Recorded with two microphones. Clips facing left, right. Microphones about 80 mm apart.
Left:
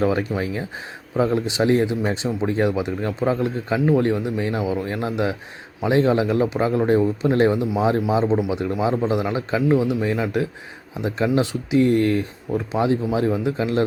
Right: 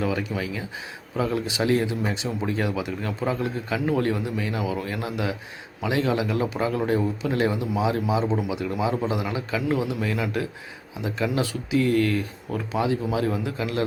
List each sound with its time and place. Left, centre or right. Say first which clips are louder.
0.0 s speech: left 5 dB; left